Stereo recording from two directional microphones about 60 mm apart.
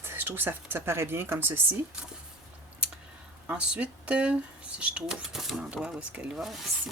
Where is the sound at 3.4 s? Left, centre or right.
Centre.